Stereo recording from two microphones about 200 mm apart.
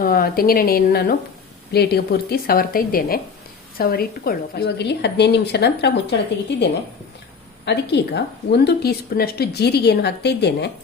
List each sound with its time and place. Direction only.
0.0 s a woman's voice: 45° left (ahead or behind)
7.6 s a woman's voice: 60° left (ahead or behind)